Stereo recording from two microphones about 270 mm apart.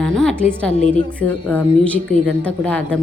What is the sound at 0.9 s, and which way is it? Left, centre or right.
A woman's voice, centre.